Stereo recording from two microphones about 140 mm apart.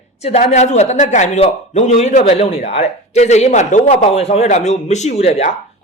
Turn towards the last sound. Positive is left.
turn(degrees=50)  # may be behind; listen again after turning